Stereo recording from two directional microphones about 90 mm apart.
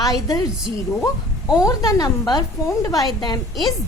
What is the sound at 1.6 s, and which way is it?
A woman's voice, 40° left (ahead or behind).